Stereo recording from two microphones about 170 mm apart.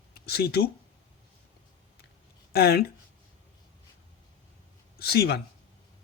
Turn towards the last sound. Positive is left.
turn(degrees=65)  # may be behind; listen again after turning